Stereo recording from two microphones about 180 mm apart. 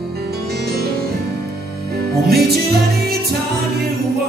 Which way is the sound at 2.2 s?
60° right (ahead or behind).